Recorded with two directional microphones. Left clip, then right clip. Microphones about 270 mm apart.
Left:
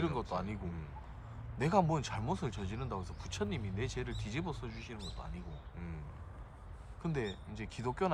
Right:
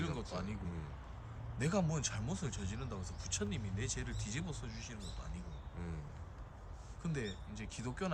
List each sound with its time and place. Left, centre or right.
0.0 s a sound: centre
1.5 s speech: left
7.0 s speech: centre